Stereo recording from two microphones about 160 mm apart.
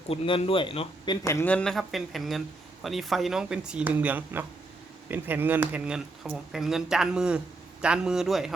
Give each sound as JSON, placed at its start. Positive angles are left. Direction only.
{"t": 0.1, "sound": "speech", "side_deg": 35}
{"t": 1.2, "sound": "speech", "side_deg": 15}